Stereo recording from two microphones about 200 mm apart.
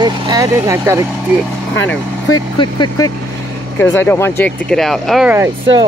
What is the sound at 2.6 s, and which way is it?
Speech, 20° left (ahead or behind).